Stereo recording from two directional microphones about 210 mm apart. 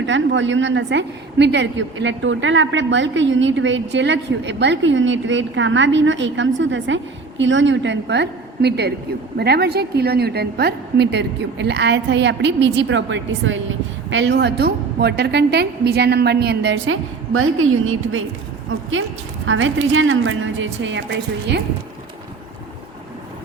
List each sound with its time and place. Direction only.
0.0 s a woman's voice: 60° right (ahead or behind)
19.5 s a woman's voice: 65° right (ahead or behind)